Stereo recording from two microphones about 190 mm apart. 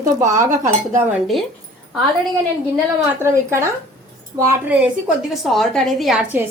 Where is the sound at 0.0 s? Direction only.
15° right (ahead or behind).